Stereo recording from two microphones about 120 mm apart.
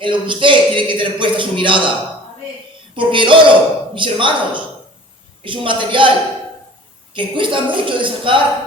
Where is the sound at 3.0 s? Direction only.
45° right (ahead or behind).